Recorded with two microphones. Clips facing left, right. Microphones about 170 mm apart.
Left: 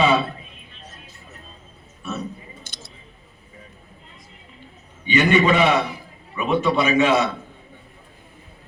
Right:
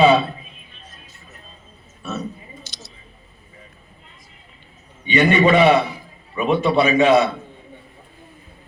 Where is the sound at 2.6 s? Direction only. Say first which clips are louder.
Right 1 dB; 55° left (ahead or behind).